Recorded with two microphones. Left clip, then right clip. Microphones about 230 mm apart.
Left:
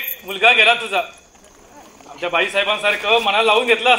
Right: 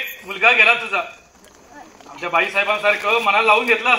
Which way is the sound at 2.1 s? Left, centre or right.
Left.